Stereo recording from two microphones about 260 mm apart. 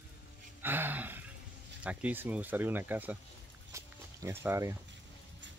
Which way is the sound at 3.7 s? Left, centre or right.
Centre.